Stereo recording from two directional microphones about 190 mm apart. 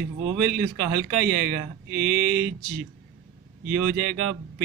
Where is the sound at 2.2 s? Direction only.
50° right (ahead or behind).